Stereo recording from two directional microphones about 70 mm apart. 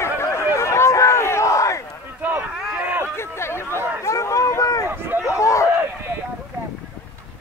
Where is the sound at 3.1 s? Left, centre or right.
Left.